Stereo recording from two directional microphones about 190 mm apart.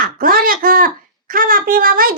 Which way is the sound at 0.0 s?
50° right (ahead or behind).